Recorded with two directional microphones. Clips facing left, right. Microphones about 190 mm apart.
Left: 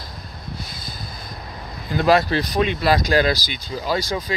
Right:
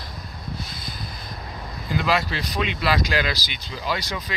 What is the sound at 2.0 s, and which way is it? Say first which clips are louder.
Speech: left 9 dB; 45° left (ahead or behind).